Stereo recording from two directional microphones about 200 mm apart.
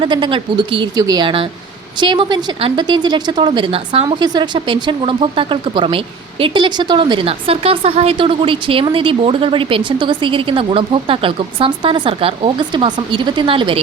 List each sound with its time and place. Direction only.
0.0 s speech: 25° right (ahead or behind)